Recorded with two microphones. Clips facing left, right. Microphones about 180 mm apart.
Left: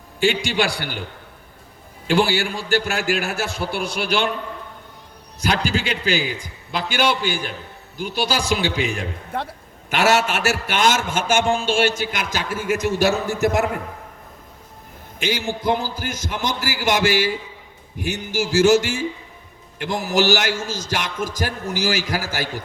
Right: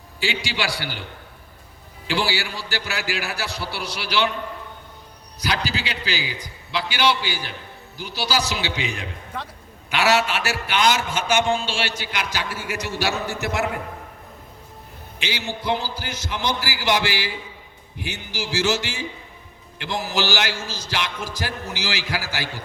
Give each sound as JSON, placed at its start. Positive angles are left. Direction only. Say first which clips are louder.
{"t": 0.2, "sound": "a man's voice", "louder": "left 7 dB", "side_deg": 50}
{"t": 2.0, "sound": "a man's voice", "louder": "left 6 dB", "side_deg": 50}
{"t": 5.4, "sound": "a man's voice", "louder": "left 4 dB", "side_deg": 50}
{"t": 15.2, "sound": "a man's voice", "louder": "left 6 dB", "side_deg": 45}